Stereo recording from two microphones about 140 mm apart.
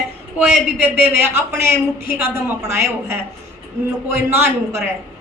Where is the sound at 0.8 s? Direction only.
15° right (ahead or behind).